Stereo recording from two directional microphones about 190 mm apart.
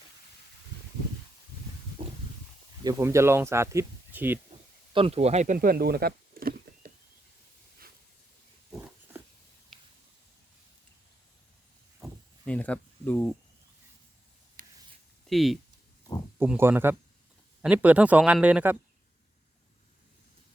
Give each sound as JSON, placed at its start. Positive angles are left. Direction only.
{"t": 2.0, "sound": "a sound", "side_deg": -45}
{"t": 2.8, "sound": "speech", "side_deg": -15}
{"t": 4.9, "sound": "speech", "side_deg": -30}
{"t": 12.5, "sound": "a sound", "side_deg": 5}
{"t": 15.3, "sound": "speech", "side_deg": 0}
{"t": 16.4, "sound": "speech", "side_deg": -10}